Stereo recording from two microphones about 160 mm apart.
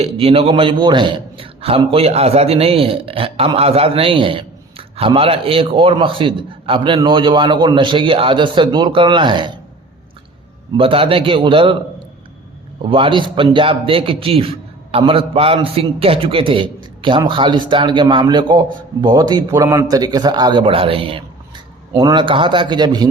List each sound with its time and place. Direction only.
0.0 s a man's voice: 35° right (ahead or behind)
10.8 s a man's voice: 35° right (ahead or behind)
12.9 s a man's voice: 30° right (ahead or behind)